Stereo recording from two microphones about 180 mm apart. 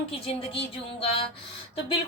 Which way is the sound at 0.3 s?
30° left (ahead or behind).